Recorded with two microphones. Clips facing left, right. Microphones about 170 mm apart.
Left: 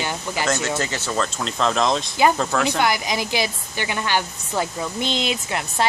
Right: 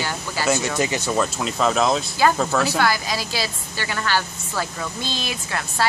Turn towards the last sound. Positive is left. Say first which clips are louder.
# left 1 dB
turn(degrees=20)  # may be behind; listen again after turning